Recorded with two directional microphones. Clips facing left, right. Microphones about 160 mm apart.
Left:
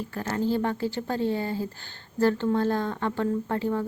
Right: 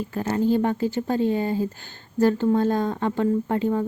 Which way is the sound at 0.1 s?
20° right (ahead or behind).